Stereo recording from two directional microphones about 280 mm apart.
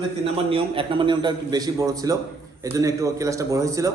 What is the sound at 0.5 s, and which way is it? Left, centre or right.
A man's voice, centre.